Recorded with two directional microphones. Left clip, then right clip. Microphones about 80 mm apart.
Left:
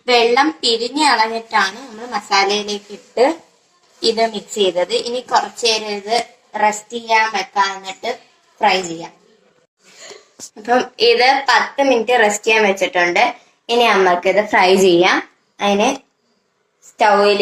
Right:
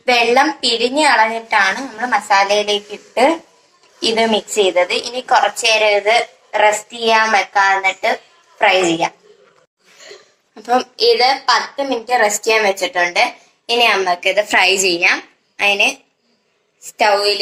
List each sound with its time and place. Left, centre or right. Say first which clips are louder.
0.1 s a woman's voice: right 1 dB; right
10.9 s a woman's voice: left 1 dB; left
17.0 s a woman's voice: left 1 dB; left